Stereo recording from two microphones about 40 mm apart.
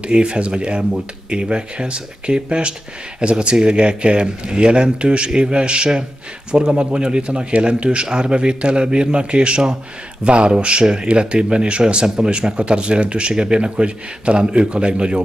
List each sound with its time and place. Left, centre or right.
0.0 s speech: right